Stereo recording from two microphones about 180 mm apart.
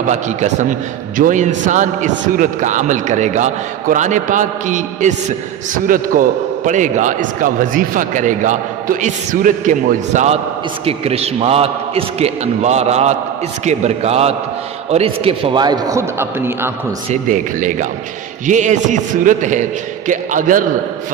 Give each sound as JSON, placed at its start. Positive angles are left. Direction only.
{"t": 0.1, "sound": "a man's voice", "side_deg": -40}
{"t": 17.1, "sound": "a man's voice", "side_deg": -45}